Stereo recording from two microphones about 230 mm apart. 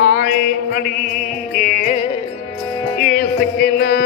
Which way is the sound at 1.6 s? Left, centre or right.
Left.